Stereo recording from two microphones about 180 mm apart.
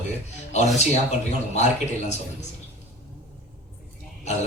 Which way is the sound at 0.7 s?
40° left (ahead or behind).